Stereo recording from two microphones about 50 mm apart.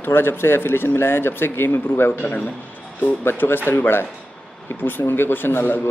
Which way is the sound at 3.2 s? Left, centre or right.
Left.